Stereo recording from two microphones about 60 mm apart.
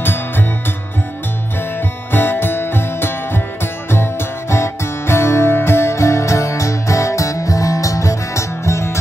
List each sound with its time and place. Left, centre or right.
2.1 s music: left